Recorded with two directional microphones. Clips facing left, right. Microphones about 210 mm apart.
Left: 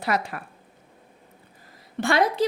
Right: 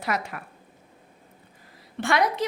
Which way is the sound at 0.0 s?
30° left (ahead or behind).